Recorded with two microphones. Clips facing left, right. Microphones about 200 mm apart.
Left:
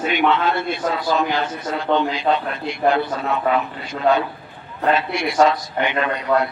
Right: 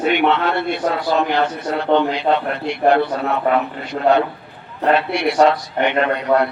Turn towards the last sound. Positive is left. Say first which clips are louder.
# right 3 dB
turn(degrees=-60)  # may be behind; listen again after turning